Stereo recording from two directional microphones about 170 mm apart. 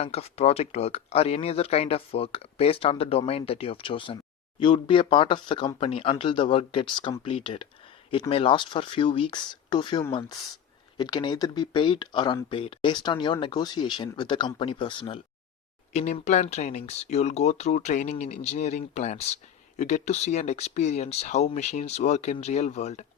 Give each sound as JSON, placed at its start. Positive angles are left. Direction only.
{"t": 0.0, "sound": "speech", "side_deg": 35}
{"t": 15.9, "sound": "speech", "side_deg": 40}